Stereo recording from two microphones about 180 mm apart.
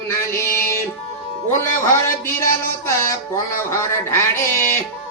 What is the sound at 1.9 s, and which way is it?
Speech, 15° left (ahead or behind).